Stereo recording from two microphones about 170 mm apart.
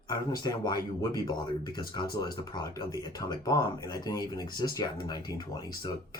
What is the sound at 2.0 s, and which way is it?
Speech, 25° left (ahead or behind).